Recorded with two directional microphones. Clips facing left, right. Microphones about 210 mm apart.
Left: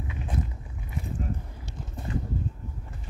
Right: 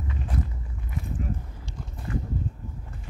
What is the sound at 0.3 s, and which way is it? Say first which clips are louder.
Walk: right 1 dB; 25° left (ahead or behind).